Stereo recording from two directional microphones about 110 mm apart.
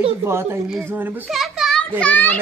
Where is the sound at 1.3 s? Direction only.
Centre (ahead or behind).